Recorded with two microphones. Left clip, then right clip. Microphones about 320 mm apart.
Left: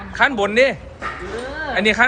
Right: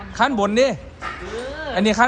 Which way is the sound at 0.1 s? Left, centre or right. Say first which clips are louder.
Left 2 dB; centre.